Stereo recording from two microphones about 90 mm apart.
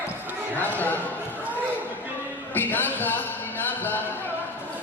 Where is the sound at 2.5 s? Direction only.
20° left (ahead or behind).